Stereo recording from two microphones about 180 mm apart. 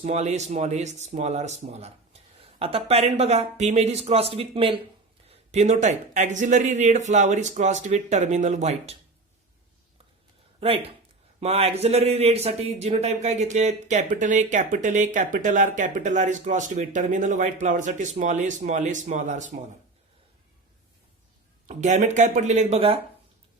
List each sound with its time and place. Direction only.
0.0 s speech: 40° right (ahead or behind)
10.6 s speech: 35° right (ahead or behind)
21.7 s speech: 40° right (ahead or behind)